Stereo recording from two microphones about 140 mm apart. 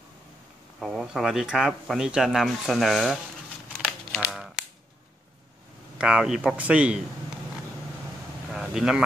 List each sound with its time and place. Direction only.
0.7 s speech: centre (ahead or behind)
4.2 s typewriter: 5° right (ahead or behind)
5.9 s speech: 5° right (ahead or behind)
8.5 s speech: centre (ahead or behind)